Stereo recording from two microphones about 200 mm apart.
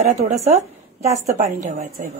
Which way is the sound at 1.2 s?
35° right (ahead or behind).